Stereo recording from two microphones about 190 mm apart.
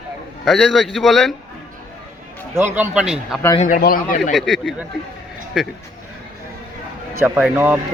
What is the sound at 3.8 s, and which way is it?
Speech, 50° left (ahead or behind).